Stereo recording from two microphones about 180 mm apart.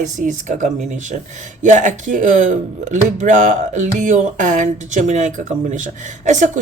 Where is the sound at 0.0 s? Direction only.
45° right (ahead or behind).